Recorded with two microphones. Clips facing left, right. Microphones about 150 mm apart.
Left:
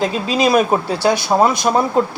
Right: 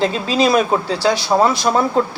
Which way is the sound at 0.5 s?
15° left (ahead or behind).